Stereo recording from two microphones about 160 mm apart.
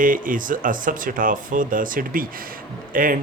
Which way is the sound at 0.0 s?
60° right (ahead or behind).